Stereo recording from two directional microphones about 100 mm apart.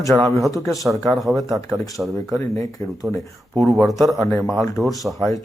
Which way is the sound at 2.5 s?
30° left (ahead or behind).